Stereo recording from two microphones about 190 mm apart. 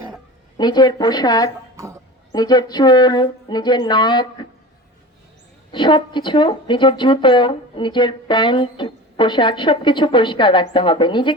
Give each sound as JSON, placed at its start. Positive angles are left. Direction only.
{"t": 0.5, "sound": "speech", "side_deg": 20}
{"t": 1.7, "sound": "speech", "side_deg": -15}
{"t": 2.3, "sound": "speech", "side_deg": 20}
{"t": 5.7, "sound": "speech", "side_deg": 25}